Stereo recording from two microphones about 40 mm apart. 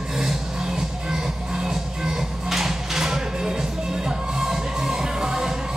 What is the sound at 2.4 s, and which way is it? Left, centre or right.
Music, centre.